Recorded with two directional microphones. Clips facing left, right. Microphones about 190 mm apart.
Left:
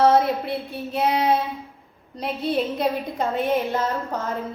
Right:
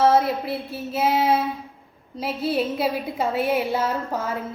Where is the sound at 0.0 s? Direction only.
Centre (ahead or behind).